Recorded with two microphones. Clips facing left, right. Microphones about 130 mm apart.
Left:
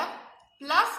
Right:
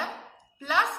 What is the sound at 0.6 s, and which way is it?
Speech, 20° left (ahead or behind).